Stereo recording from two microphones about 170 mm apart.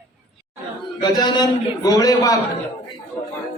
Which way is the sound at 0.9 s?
25° left (ahead or behind).